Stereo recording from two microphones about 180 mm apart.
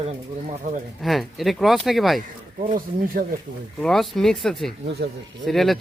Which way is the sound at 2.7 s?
55° right (ahead or behind).